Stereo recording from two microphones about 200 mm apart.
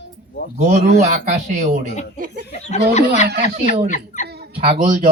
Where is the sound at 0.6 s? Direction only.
35° right (ahead or behind).